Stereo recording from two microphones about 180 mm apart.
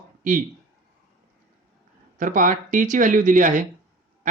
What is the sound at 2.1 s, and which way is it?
Speech, 50° right (ahead or behind).